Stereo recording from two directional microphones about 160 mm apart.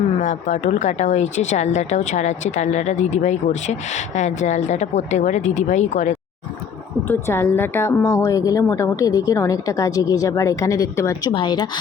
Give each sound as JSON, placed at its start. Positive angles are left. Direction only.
{"t": 0.2, "sound": "speech", "side_deg": 50}
{"t": 7.1, "sound": "a woman's voice", "side_deg": 15}